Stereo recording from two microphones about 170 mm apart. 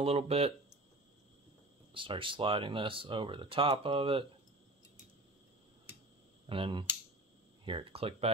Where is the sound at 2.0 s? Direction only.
30° right (ahead or behind).